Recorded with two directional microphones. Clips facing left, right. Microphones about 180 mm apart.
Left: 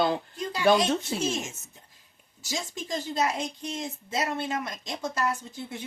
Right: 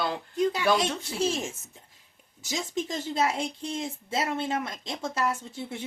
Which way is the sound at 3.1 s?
25° right (ahead or behind).